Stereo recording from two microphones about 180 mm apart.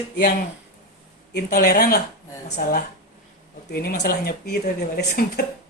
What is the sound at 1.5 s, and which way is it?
Speech, 55° left (ahead or behind).